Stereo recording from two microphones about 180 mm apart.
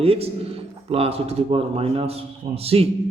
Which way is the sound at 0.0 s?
35° right (ahead or behind).